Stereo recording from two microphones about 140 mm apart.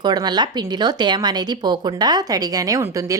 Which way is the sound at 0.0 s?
30° right (ahead or behind).